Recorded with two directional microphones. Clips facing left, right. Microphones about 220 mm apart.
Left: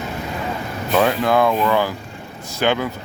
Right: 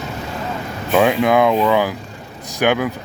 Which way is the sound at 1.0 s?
15° right (ahead or behind).